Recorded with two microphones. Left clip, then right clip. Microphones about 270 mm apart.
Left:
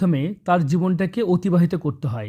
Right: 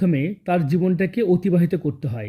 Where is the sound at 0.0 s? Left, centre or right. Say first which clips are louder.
Even; centre.